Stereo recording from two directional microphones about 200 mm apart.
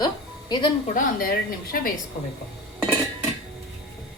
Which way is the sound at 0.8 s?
45° left (ahead or behind).